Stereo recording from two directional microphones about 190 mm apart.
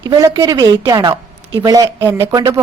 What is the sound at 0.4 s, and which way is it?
A woman's voice, 20° right (ahead or behind).